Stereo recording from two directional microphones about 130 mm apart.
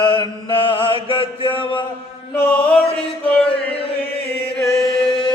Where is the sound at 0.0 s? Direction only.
35° left (ahead or behind).